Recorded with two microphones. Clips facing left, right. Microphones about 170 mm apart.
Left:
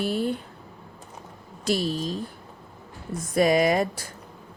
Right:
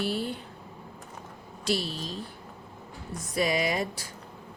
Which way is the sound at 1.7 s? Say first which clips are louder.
Left 5 dB; 45° left (ahead or behind).